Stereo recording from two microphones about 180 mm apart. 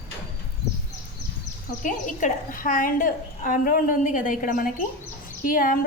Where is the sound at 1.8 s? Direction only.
45° left (ahead or behind).